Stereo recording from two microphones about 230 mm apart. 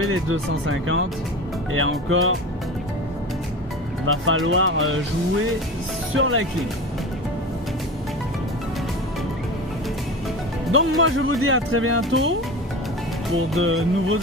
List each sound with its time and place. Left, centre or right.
0.0 s speech: right
4.0 s speech: right
6.1 s speech: right
10.7 s speech: right
13.6 s speech: right